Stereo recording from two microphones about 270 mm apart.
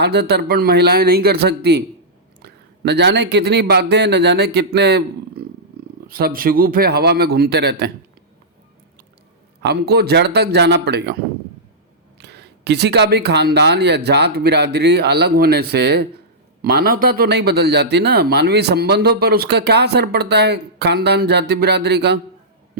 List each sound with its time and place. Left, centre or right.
0.0 s a man's voice: right
9.6 s a man's voice: right